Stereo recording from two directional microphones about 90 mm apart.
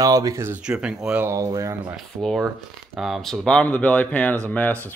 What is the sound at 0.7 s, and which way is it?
Speech, 10° right (ahead or behind).